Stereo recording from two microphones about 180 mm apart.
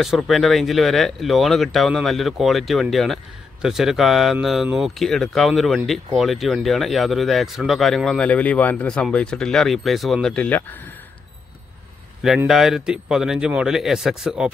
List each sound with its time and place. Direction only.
0.0 s speech: centre (ahead or behind)
12.4 s speech: centre (ahead or behind)